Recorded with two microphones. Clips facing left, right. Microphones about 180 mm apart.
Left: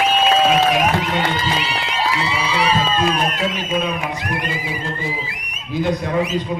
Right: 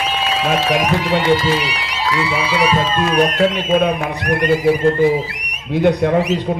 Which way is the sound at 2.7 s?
75° right (ahead or behind).